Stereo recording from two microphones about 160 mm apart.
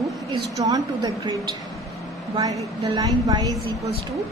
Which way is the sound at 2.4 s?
20° right (ahead or behind).